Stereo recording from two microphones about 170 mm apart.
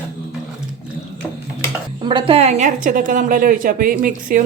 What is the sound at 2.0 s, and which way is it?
A woman's voice, 30° right (ahead or behind).